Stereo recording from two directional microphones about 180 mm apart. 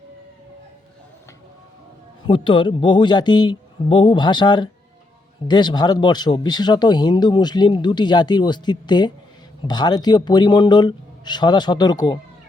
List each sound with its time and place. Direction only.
2.2 s speech: 25° left (ahead or behind)